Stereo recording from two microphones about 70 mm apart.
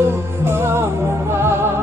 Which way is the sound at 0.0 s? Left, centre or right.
Right.